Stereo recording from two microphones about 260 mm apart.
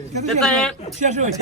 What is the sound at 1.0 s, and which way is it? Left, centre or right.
Speech, right.